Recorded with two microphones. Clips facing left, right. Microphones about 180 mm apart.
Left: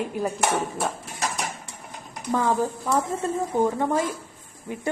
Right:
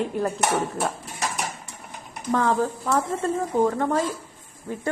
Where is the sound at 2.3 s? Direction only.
15° left (ahead or behind).